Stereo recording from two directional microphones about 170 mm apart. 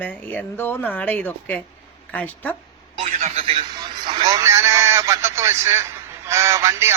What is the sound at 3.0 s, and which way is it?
Speech, 40° right (ahead or behind).